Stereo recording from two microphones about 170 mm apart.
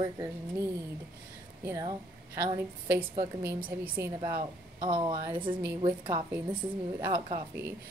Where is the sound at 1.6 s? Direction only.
20° right (ahead or behind).